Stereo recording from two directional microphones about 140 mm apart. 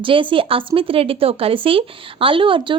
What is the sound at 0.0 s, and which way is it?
A woman's voice, 35° right (ahead or behind).